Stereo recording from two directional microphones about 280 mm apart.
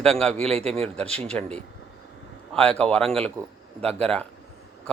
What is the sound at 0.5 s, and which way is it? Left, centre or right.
Speech, right.